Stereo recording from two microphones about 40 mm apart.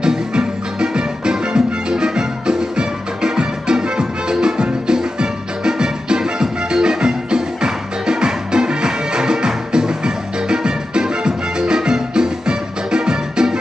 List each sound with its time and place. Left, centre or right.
0.0 s music: centre